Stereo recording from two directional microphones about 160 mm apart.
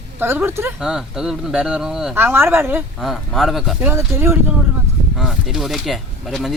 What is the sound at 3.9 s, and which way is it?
Speech, 15° right (ahead or behind).